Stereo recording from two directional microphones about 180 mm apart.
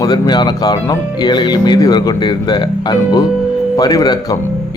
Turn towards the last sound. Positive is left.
turn(degrees=20)  # may be behind; listen again after turning